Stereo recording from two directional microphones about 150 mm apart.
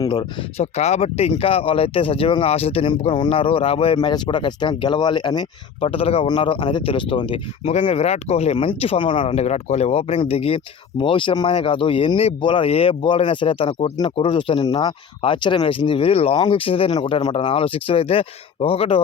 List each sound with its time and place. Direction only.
0.0 s speech: 25° left (ahead or behind)
0.5 s speech: 45° left (ahead or behind)